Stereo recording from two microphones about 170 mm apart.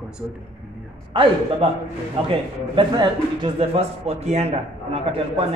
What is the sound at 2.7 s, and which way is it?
Speech, 30° right (ahead or behind).